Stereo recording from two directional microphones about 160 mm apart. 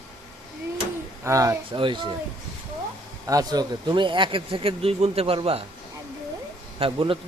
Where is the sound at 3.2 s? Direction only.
25° right (ahead or behind).